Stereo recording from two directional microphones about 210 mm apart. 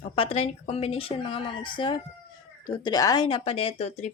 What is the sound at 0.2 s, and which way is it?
Speech, 30° left (ahead or behind).